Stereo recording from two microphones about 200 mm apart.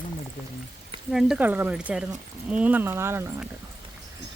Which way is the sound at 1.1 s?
Centre (ahead or behind).